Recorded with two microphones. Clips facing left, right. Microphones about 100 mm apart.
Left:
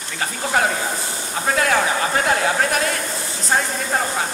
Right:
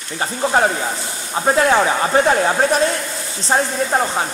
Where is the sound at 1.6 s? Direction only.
30° right (ahead or behind).